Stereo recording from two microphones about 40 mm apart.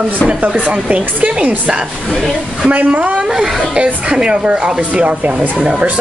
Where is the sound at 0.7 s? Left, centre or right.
Right.